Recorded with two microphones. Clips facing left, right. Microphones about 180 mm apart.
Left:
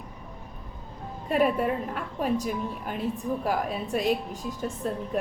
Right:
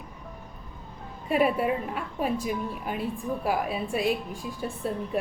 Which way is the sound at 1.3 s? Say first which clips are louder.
Even; 5° right (ahead or behind).